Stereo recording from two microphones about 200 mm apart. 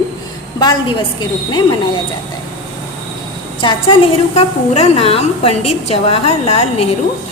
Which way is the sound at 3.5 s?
25° left (ahead or behind).